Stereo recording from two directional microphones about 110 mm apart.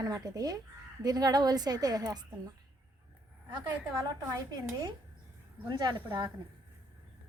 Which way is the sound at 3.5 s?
40° right (ahead or behind).